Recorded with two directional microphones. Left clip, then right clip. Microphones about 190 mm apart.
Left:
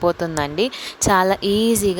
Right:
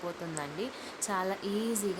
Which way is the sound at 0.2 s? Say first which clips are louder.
Left 16 dB; 50° left (ahead or behind).